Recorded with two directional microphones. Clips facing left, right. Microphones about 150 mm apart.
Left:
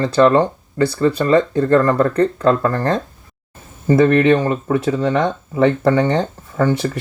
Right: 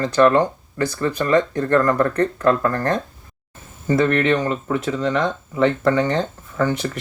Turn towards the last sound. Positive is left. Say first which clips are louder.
# left 4 dB
turn(degrees=30)  # may be behind; listen again after turning